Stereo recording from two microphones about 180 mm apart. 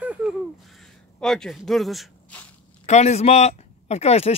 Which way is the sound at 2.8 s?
40° left (ahead or behind).